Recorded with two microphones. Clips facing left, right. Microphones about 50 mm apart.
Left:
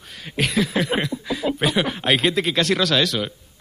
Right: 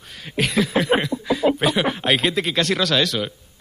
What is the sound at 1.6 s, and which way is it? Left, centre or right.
Speech, centre.